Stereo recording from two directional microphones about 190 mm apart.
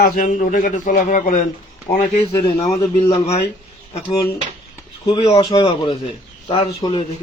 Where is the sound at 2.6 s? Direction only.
35° left (ahead or behind).